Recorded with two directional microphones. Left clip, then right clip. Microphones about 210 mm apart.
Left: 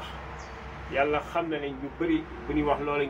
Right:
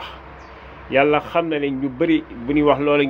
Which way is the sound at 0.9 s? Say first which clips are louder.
Right 10 dB; 45° right (ahead or behind).